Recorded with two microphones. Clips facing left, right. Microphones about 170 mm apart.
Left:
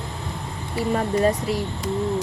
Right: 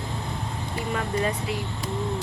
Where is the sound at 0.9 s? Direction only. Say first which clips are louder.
Left 7 dB; 35° left (ahead or behind).